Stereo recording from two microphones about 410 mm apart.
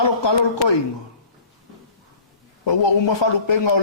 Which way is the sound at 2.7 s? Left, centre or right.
Left.